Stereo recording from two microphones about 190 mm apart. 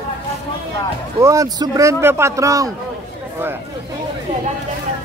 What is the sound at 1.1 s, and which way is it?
A man's voice, 15° right (ahead or behind).